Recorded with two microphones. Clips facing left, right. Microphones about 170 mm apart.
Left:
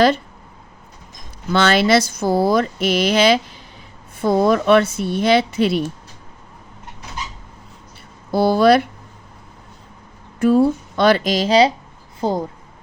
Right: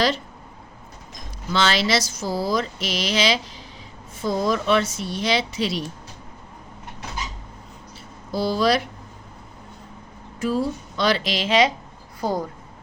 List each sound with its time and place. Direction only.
1.5 s speech: 55° left (ahead or behind)
8.3 s speech: 55° left (ahead or behind)
10.4 s speech: 55° left (ahead or behind); by 11.7 s 35° left (ahead or behind)
12.2 s speech: 25° left (ahead or behind)